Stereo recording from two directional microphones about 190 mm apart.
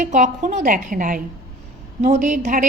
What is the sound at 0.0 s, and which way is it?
A woman's voice, 40° right (ahead or behind).